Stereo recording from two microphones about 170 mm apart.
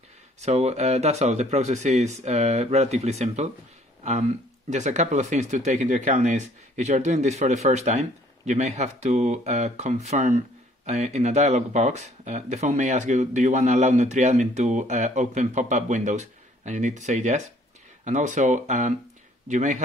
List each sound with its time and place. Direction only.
0.4 s speech: 40° right (ahead or behind)